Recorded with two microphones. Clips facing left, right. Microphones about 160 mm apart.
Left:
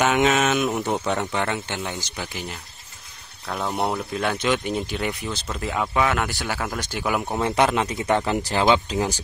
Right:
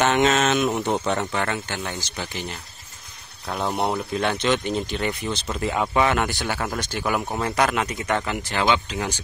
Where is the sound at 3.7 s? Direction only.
Centre (ahead or behind).